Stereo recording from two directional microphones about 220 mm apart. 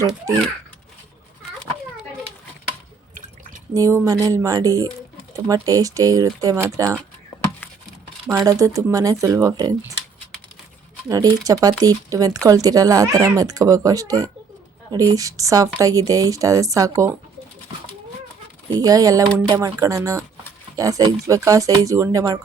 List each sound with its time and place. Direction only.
3.8 s speech: 15° right (ahead or behind)
8.3 s speech: 15° right (ahead or behind)
11.1 s speech: 15° right (ahead or behind)
18.7 s speech: 15° right (ahead or behind)